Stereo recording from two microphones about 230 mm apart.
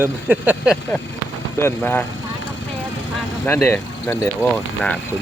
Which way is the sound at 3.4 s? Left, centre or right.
Centre.